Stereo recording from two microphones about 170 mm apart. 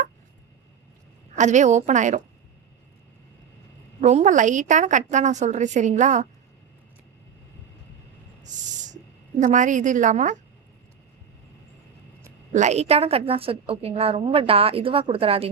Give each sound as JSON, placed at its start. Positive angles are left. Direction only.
{"t": 1.4, "sound": "a woman's voice", "side_deg": -45}
{"t": 4.0, "sound": "a woman's voice", "side_deg": -45}
{"t": 8.4, "sound": "a sound", "side_deg": -45}
{"t": 9.4, "sound": "a woman's voice", "side_deg": -45}
{"t": 12.5, "sound": "a woman's voice", "side_deg": -40}